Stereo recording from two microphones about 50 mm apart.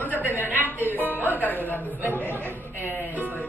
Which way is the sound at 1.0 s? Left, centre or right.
Right.